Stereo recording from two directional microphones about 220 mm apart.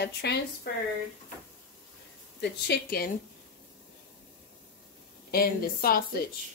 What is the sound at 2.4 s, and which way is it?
Speech, 45° left (ahead or behind).